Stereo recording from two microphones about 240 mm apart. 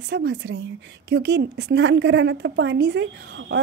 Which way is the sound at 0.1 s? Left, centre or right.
Right.